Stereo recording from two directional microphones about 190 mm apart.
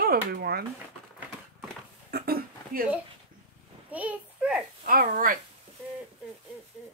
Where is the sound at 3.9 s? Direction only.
5° right (ahead or behind).